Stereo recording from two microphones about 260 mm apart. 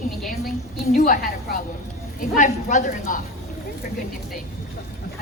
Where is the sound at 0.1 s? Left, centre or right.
Centre.